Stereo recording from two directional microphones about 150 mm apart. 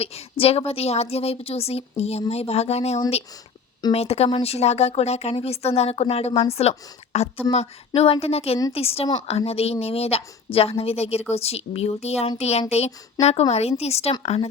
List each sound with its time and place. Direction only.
0.0 s a woman's voice: 40° left (ahead or behind)
13.2 s speech: 25° left (ahead or behind)
13.5 s a woman's voice: 45° left (ahead or behind)